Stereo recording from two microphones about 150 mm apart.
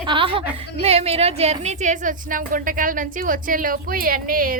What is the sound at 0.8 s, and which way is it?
A woman's voice, 40° right (ahead or behind).